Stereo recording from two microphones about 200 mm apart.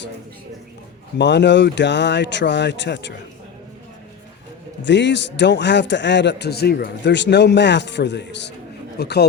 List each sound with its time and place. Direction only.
1.2 s a man's voice: 60° left (ahead or behind)
4.8 s a man's voice: 60° left (ahead or behind)